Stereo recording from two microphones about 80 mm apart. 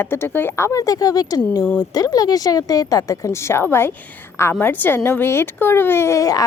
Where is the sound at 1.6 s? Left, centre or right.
Centre.